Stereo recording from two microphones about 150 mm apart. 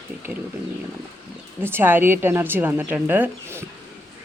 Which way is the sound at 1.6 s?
15° right (ahead or behind).